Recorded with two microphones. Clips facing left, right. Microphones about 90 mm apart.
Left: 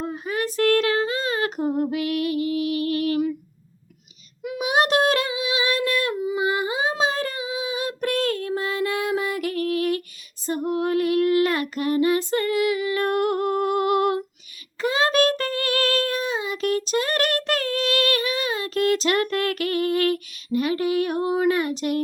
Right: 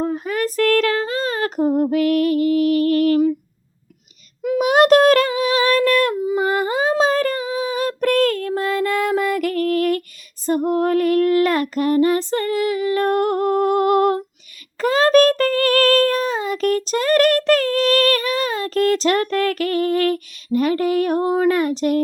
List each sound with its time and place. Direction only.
0.0 s female singing: 50° right (ahead or behind)
4.4 s humming: 50° right (ahead or behind)
10.4 s child singing: 45° right (ahead or behind)